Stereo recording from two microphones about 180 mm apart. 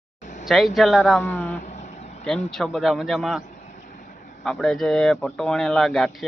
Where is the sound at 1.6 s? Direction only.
40° left (ahead or behind).